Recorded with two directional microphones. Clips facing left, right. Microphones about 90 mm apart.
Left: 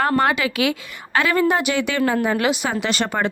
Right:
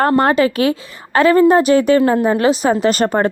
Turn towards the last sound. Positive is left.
turn(degrees=-45)  # may be behind; listen again after turning